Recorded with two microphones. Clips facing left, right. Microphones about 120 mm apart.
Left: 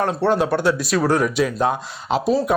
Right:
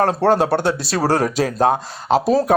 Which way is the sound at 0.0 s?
40° right (ahead or behind).